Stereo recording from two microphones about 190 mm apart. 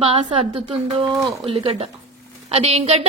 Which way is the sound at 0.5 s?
30° right (ahead or behind).